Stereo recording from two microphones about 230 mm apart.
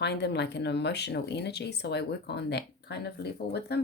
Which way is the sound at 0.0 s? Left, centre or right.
Left.